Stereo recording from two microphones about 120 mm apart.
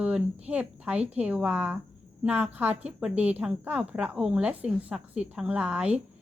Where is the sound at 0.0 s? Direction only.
10° right (ahead or behind).